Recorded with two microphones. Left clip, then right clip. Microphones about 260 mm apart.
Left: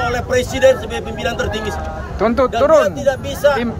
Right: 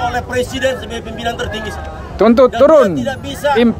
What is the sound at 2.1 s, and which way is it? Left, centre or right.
Speech, right.